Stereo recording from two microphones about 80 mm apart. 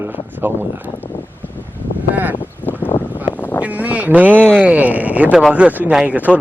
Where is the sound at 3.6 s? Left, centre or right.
Centre.